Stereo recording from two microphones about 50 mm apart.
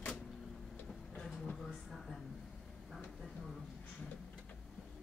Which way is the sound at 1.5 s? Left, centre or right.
Centre.